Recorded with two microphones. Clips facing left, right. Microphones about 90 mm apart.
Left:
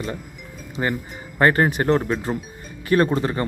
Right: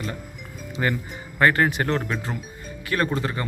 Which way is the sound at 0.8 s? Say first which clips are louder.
Left 1 dB; 20° left (ahead or behind).